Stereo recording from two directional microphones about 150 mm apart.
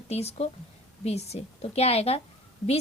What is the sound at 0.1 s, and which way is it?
A woman's voice, 45° left (ahead or behind).